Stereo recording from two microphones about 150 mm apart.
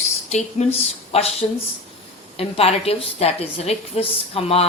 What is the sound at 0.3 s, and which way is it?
A woman's voice, 50° left (ahead or behind).